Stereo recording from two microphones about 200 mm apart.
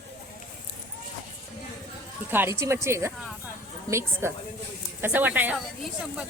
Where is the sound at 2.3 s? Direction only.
10° right (ahead or behind).